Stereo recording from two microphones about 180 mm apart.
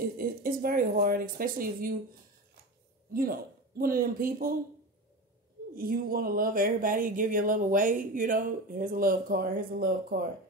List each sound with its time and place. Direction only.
0.2 s speech: 55° right (ahead or behind)
3.1 s speech: 55° right (ahead or behind)
5.8 s speech: 55° right (ahead or behind)